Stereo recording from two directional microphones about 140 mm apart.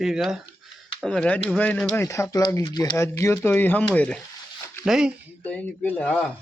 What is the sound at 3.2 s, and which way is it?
Speech, 20° left (ahead or behind).